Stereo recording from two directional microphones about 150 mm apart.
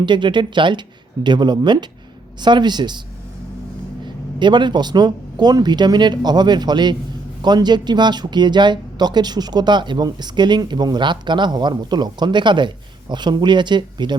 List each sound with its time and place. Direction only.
0.0 s speech: 30° right (ahead or behind)
4.0 s speech: 30° right (ahead or behind)